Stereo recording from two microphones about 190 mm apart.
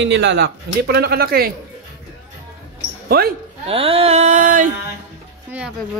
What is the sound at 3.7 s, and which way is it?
Music, 30° right (ahead or behind).